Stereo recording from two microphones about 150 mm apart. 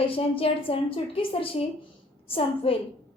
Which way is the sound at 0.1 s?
40° left (ahead or behind).